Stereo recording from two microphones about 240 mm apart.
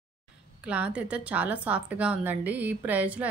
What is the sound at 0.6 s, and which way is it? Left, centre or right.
A woman's voice, centre.